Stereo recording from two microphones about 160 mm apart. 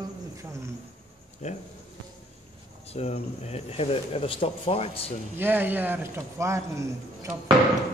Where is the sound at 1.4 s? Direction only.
50° left (ahead or behind).